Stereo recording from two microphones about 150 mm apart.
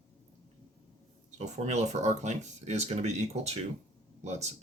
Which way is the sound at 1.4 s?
50° right (ahead or behind).